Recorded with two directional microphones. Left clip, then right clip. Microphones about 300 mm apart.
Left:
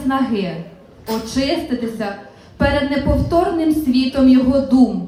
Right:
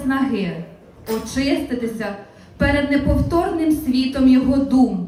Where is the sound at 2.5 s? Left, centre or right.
Centre.